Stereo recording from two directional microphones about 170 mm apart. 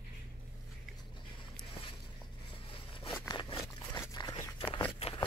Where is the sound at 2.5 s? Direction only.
30° left (ahead or behind).